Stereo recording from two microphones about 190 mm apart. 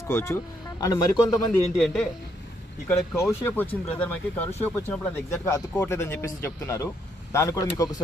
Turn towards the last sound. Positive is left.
turn(degrees=15)  # may be behind; listen again after turning